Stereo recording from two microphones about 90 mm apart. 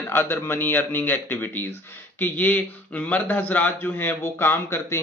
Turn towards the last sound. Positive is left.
turn(degrees=25)  # may be behind; listen again after turning